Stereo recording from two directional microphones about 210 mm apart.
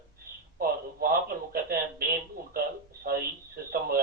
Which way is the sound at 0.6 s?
45° right (ahead or behind).